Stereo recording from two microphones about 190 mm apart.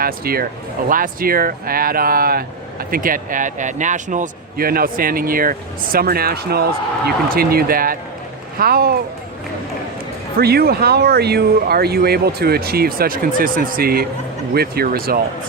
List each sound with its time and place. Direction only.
0.0 s a man's voice: 50° right (ahead or behind)
10.3 s a man's voice: 55° right (ahead or behind)